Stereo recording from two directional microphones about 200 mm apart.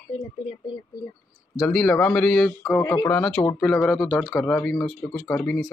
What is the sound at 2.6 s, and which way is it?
Speech, 15° left (ahead or behind).